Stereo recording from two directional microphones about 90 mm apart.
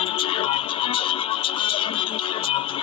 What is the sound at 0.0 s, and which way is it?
Music, 90° left.